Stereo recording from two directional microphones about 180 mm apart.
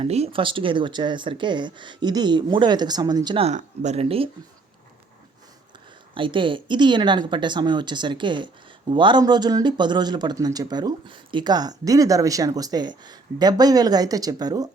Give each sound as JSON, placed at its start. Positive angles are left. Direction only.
{"t": 0.0, "sound": "speech", "side_deg": -35}
{"t": 6.1, "sound": "speech", "side_deg": -25}